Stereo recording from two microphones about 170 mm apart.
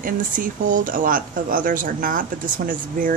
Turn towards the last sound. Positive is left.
turn(degrees=-50)  # may be behind; listen again after turning